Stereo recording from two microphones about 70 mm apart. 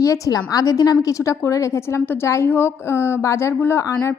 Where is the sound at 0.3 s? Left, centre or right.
Left.